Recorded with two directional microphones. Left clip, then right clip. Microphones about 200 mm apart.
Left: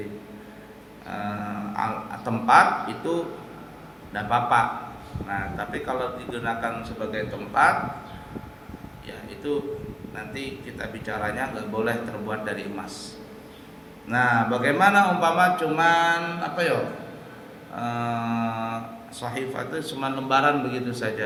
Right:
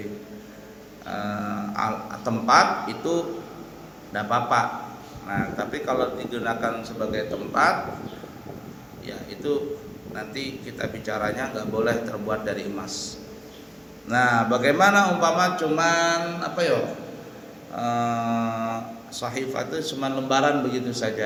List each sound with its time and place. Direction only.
1.7 s a man's voice: 15° left (ahead or behind)
9.4 s a man's voice: 15° left (ahead or behind)
14.1 s a man's voice: 10° left (ahead or behind)
17.7 s a sound: 15° left (ahead or behind)
19.2 s a man's voice: 10° left (ahead or behind)